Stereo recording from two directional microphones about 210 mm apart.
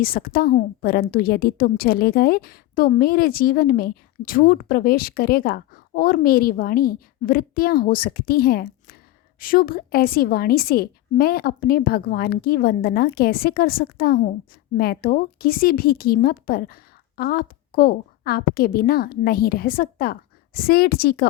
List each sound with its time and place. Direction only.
0.0 s a woman's voice: 45° left (ahead or behind)